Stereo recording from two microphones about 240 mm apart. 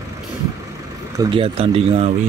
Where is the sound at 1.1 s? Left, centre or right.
Centre.